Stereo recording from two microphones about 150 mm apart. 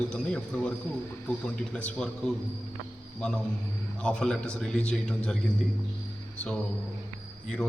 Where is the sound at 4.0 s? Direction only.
5° left (ahead or behind).